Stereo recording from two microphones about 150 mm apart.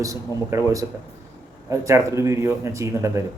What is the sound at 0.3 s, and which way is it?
Speech, 20° right (ahead or behind).